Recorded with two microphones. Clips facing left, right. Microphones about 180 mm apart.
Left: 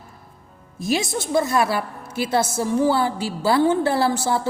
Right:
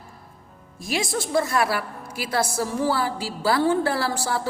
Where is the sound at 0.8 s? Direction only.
25° left (ahead or behind).